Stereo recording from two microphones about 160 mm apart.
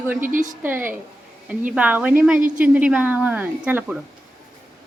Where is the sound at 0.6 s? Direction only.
10° right (ahead or behind).